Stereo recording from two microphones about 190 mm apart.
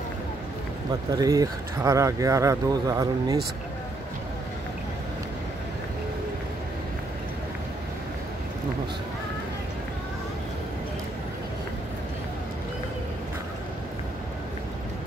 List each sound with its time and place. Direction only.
1.1 s speech: 20° right (ahead or behind)